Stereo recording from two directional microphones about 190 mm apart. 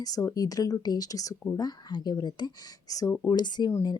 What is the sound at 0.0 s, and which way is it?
Speech, 15° left (ahead or behind).